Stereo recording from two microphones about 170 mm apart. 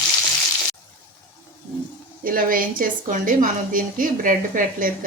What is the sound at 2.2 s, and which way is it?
A woman's voice, 55° right (ahead or behind).